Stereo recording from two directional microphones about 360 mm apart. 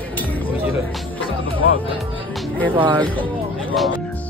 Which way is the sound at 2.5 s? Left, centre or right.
Centre.